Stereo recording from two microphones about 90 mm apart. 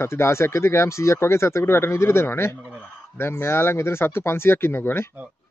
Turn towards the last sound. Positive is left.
turn(degrees=25)  # may be behind; listen again after turning